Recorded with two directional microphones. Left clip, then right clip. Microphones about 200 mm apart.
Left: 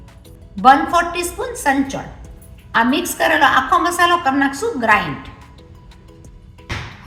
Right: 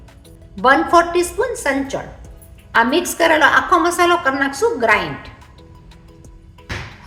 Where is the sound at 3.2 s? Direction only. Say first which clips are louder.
Right 1 dB; 45° right (ahead or behind).